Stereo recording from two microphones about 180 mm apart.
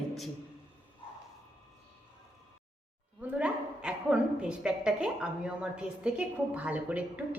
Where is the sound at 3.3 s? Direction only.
5° right (ahead or behind).